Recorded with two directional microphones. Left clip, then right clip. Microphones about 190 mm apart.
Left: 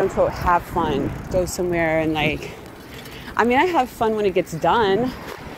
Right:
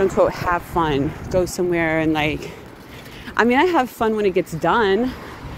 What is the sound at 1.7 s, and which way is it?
Speech, 30° right (ahead or behind).